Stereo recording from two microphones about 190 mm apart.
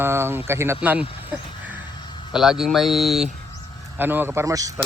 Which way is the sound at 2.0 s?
25° left (ahead or behind).